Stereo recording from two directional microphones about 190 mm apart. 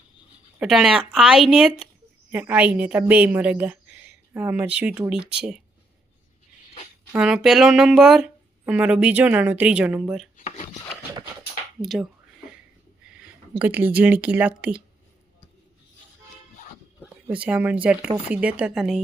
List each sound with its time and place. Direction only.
0.6 s a woman's voice: 5° right (ahead or behind)
7.1 s speech: 5° right (ahead or behind)
10.3 s filing: 40° left (ahead or behind)
11.8 s speech: centre (ahead or behind)
13.1 s speech: 10° right (ahead or behind)
17.0 s a woman's voice: 5° right (ahead or behind)